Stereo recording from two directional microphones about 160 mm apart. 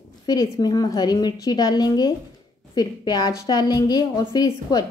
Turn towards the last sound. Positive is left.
turn(degrees=25)  # may be behind; listen again after turning